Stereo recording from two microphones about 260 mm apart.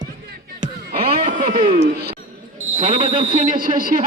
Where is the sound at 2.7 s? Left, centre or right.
Right.